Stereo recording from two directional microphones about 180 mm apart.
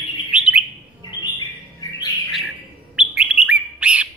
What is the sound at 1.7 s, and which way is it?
Bird, 25° left (ahead or behind).